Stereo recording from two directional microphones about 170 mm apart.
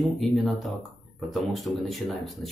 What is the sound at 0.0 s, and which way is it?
Speech, centre (ahead or behind).